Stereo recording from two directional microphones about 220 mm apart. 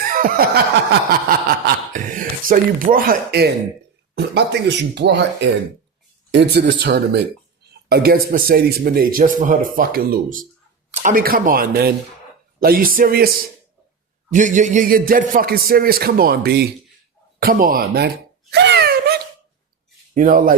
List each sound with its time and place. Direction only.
0.1 s a sound: 40° right (ahead or behind)
1.3 s chuckle: 40° right (ahead or behind)
2.4 s a man's voice: 40° right (ahead or behind)
14.3 s a man's voice: 35° right (ahead or behind)
18.5 s wail: 50° right (ahead or behind)
20.1 s a man's voice: 40° right (ahead or behind)